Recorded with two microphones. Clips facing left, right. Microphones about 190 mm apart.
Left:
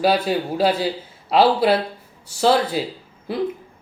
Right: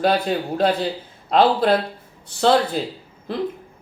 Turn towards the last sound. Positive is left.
turn(degrees=5)  # may be behind; listen again after turning